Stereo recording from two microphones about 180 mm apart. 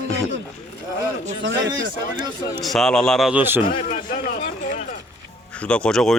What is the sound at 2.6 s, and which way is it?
Speech, centre (ahead or behind).